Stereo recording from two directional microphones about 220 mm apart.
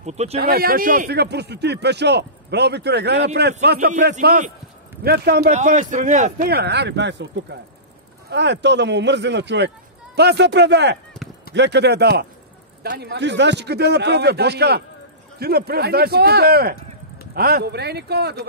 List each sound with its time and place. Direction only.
0.0 s speech: 30° right (ahead or behind)
0.4 s a man's voice: 45° right (ahead or behind)
5.5 s a man's voice: 35° right (ahead or behind)